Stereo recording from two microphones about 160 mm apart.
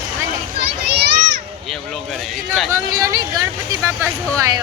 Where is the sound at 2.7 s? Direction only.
20° right (ahead or behind).